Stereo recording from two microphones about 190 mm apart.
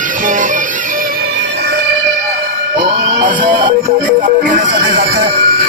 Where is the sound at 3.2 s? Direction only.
40° right (ahead or behind).